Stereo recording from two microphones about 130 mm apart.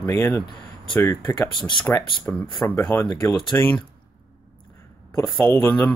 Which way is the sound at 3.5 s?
20° left (ahead or behind).